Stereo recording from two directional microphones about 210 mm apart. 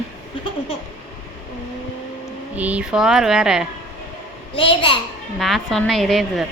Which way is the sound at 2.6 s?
5° right (ahead or behind).